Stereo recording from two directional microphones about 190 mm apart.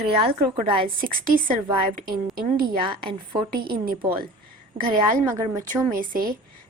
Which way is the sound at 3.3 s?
50° right (ahead or behind).